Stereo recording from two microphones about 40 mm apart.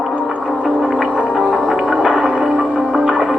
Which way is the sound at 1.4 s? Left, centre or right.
Centre.